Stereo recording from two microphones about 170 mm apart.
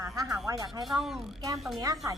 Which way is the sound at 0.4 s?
20° right (ahead or behind).